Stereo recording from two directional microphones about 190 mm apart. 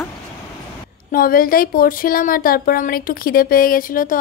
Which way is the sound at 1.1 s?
50° left (ahead or behind).